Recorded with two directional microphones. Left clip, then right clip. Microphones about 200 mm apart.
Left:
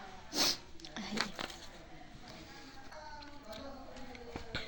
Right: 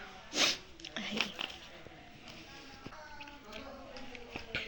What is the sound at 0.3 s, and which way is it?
Zipper, 5° left (ahead or behind).